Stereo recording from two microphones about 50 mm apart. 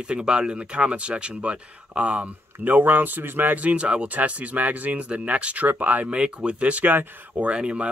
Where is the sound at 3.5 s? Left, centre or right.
Right.